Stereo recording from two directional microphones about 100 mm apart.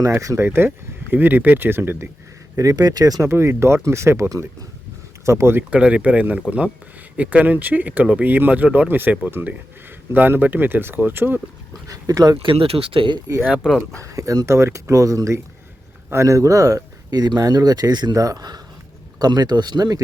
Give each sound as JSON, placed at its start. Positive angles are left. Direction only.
{"t": 0.0, "sound": "speech", "side_deg": -35}
{"t": 2.6, "sound": "speech", "side_deg": -40}
{"t": 3.2, "sound": "speech", "side_deg": -25}
{"t": 5.7, "sound": "speech", "side_deg": -10}
{"t": 11.9, "sound": "speech", "side_deg": -35}
{"t": 12.4, "sound": "speech", "side_deg": -65}
{"t": 13.9, "sound": "speech", "side_deg": -30}